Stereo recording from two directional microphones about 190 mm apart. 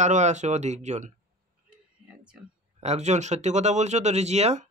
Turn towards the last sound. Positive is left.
turn(degrees=-35)  # may be behind; listen again after turning